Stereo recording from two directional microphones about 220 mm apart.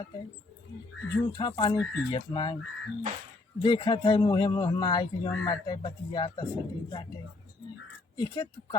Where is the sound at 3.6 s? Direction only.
20° left (ahead or behind).